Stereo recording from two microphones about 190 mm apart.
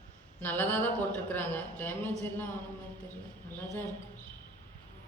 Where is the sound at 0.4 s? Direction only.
10° left (ahead or behind).